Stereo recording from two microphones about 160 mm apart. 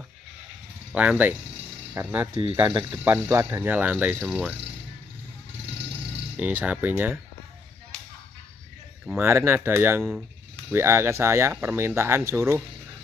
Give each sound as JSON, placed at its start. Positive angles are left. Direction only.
{"t": 0.9, "sound": "speech", "side_deg": -10}
{"t": 6.3, "sound": "speech", "side_deg": -10}
{"t": 9.0, "sound": "speech", "side_deg": -15}